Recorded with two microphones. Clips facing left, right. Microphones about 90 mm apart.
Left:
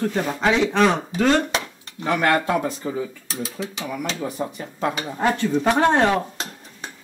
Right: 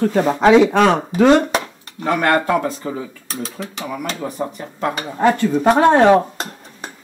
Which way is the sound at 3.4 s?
45° right (ahead or behind).